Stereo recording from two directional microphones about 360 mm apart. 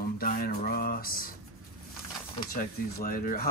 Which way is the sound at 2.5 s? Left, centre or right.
Left.